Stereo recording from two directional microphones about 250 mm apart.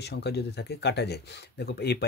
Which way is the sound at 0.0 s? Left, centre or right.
Left.